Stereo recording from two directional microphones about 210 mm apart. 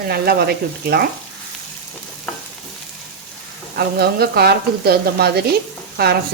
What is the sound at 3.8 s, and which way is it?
Speech, 50° right (ahead or behind).